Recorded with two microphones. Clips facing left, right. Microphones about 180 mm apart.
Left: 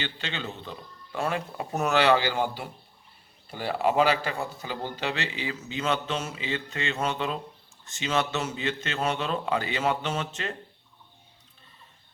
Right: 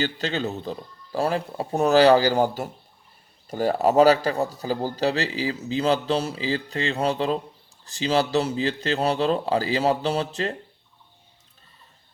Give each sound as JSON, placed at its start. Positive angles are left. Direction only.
{"t": 0.0, "sound": "speech", "side_deg": -40}